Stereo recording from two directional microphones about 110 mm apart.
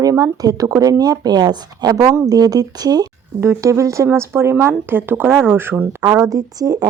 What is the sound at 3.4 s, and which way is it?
Speech, 25° right (ahead or behind).